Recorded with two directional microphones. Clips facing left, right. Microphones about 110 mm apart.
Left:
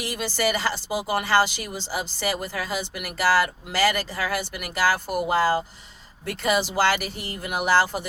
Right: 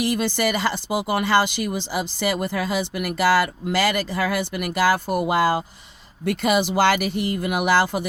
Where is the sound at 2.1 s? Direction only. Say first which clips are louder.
Right 6 dB; 50° right (ahead or behind).